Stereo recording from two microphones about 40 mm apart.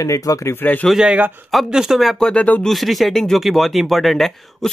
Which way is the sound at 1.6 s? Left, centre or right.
Centre.